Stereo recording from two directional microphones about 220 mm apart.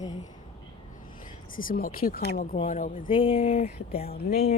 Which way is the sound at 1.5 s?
40° left (ahead or behind).